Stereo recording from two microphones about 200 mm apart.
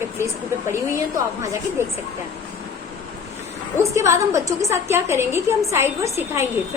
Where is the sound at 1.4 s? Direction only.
15° right (ahead or behind).